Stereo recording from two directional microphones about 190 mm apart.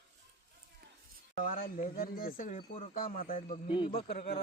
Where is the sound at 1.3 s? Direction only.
45° left (ahead or behind).